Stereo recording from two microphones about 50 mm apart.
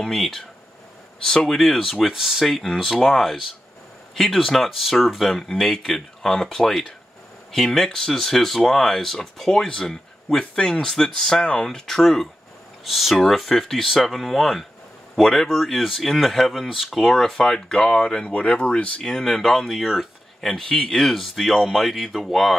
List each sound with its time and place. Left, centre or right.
0.0 s speech: centre
2.4 s speech: centre
12.8 s speech: centre
17.2 s speech: centre
18.3 s speech: left; by 19.7 s centre
19.7 s speech: centre
20.3 s speech: centre